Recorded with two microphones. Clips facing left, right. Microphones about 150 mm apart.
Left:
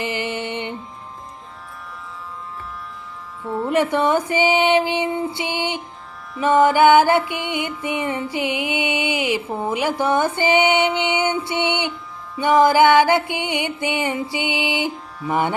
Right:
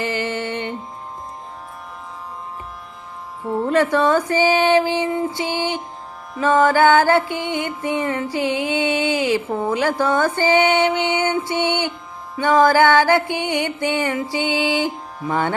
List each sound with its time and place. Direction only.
0.0 s music: 15° left (ahead or behind)
3.4 s music: 45° right (ahead or behind)
3.7 s music: 15° left (ahead or behind)